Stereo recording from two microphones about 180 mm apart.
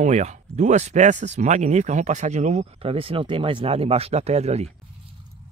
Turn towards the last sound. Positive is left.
turn(degrees=-35)  # may be behind; listen again after turning